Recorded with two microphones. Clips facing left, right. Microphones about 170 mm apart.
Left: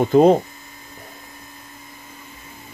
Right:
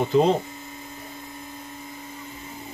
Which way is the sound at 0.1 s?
55° left (ahead or behind).